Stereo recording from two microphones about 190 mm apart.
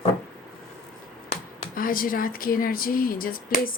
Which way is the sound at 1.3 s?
45° left (ahead or behind).